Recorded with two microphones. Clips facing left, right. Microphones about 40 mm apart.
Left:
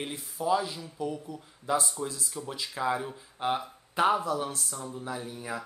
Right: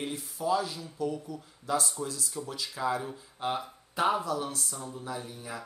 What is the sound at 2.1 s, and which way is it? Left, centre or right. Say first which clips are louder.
Speech: even; left.